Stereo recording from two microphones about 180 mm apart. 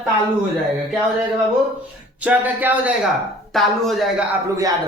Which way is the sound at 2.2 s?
10° right (ahead or behind).